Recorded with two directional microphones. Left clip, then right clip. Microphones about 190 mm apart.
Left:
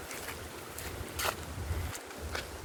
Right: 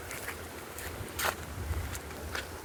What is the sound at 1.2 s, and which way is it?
Boat, centre (ahead or behind).